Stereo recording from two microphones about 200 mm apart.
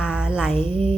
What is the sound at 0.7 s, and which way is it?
Music, 25° right (ahead or behind).